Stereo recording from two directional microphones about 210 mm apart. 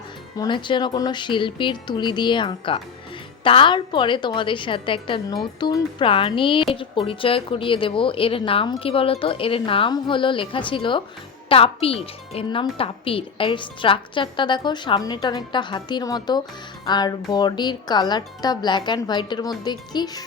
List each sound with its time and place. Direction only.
0.3 s speech: 20° left (ahead or behind)